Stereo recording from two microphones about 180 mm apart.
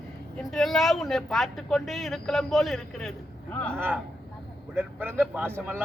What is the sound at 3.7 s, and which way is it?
A man's voice, 10° right (ahead or behind).